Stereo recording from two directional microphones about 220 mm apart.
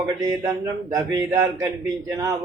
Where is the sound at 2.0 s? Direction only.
15° right (ahead or behind).